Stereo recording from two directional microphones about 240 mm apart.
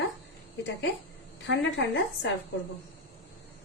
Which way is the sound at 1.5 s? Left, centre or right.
Left.